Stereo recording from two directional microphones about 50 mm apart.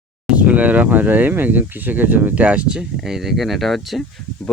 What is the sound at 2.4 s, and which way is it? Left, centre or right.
Speech, right.